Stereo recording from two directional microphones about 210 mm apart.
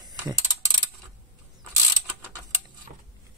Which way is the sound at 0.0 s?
20° right (ahead or behind).